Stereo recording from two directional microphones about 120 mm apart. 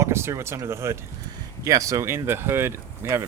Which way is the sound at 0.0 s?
20° right (ahead or behind).